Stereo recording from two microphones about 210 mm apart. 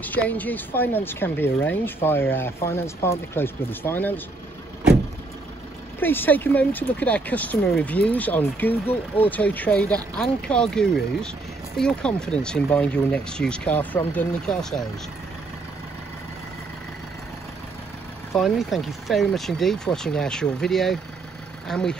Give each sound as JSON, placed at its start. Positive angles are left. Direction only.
{"t": 0.0, "sound": "speech", "side_deg": 10}
{"t": 5.9, "sound": "speech", "side_deg": 10}
{"t": 8.8, "sound": "speech", "side_deg": 25}
{"t": 9.3, "sound": "speech", "side_deg": 10}
{"t": 18.3, "sound": "speech", "side_deg": 0}